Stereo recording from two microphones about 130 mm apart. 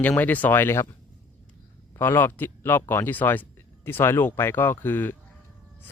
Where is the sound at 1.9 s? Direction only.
15° left (ahead or behind).